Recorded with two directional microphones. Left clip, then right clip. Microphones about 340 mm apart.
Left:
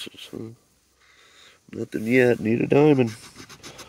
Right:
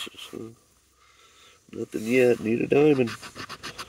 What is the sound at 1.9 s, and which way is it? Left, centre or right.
Speech, left.